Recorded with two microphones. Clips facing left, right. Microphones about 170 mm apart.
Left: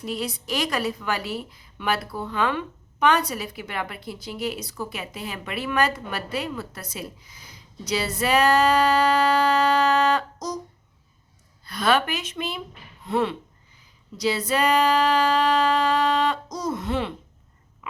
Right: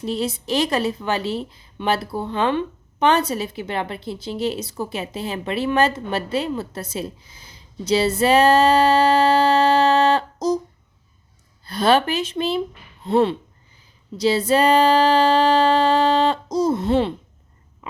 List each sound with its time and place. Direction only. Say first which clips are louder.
0.0 s a woman's voice: right 5 dB; 25° right (ahead or behind)
11.6 s a woman's voice: right 5 dB; 30° right (ahead or behind)
13.7 s a sound: right 8 dB; 30° right (ahead or behind)